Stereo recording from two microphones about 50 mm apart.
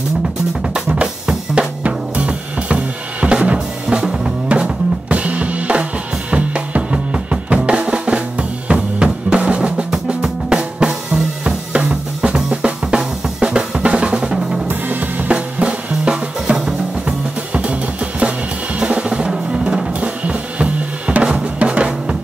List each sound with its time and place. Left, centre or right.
0.9 s drum kit: right
6.3 s drum: right
14.7 s drum kit: right; by 16.7 s centre
18.8 s drum: right